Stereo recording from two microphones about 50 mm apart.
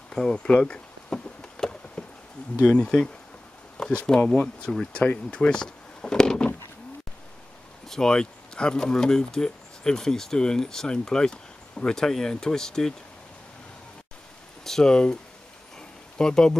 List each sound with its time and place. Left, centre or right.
0.1 s a sound: centre
2.6 s speech: centre
4.9 s a sound: left
7.9 s speech: centre
14.6 s speech: centre
16.2 s speech: centre